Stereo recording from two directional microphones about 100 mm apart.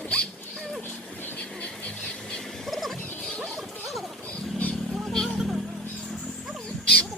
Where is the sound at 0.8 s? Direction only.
15° left (ahead or behind).